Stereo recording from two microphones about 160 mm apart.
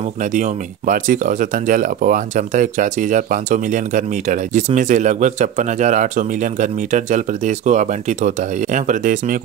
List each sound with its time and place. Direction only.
0.2 s speech: 50° right (ahead or behind)